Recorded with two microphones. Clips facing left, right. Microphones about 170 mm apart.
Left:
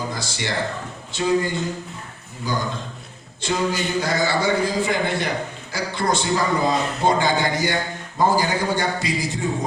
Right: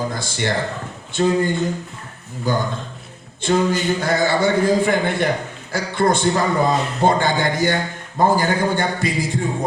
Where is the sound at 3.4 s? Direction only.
55° right (ahead or behind).